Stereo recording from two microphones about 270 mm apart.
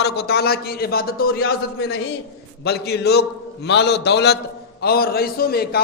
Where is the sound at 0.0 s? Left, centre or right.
Left.